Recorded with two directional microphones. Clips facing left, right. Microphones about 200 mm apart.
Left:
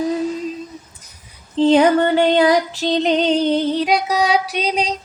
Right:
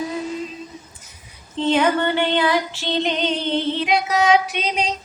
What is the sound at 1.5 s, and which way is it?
Female singing, 35° left (ahead or behind).